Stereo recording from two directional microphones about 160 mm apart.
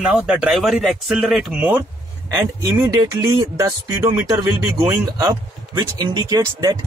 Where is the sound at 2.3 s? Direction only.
25° right (ahead or behind).